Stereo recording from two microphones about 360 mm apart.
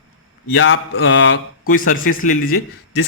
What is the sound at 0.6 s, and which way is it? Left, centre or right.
A man's voice, left.